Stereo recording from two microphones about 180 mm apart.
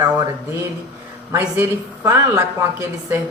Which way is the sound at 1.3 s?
15° right (ahead or behind).